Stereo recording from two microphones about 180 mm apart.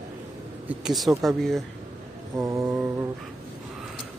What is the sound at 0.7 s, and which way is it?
Speech, centre (ahead or behind).